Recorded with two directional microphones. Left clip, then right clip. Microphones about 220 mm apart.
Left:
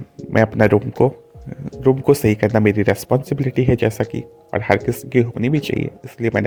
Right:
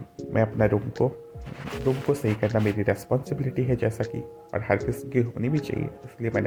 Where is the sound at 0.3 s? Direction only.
45° left (ahead or behind).